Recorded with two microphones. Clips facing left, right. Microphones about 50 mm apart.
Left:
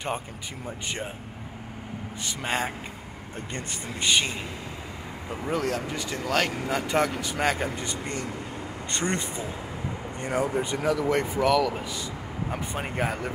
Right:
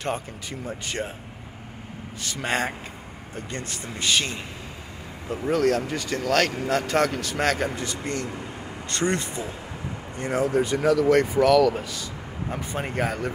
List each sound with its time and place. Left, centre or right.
0.7 s speech: centre
2.2 s speech: centre
3.3 s speech: left
5.3 s speech: centre
7.7 s speech: left; by 12.9 s centre
12.9 s speech: left